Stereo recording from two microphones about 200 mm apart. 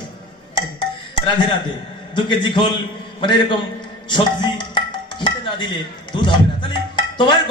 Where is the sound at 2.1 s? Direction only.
25° left (ahead or behind).